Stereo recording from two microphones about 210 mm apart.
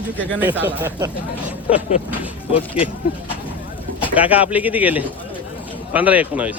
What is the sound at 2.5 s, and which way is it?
Speech, 25° left (ahead or behind).